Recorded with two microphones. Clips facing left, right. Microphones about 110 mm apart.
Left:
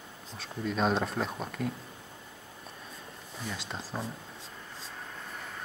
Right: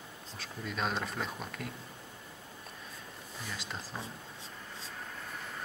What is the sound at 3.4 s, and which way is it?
Speech, centre (ahead or behind).